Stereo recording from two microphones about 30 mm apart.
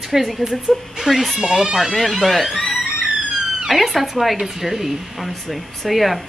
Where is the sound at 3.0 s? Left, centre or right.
Right.